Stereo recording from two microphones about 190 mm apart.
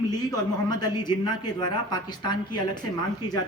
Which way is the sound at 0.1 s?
20° left (ahead or behind).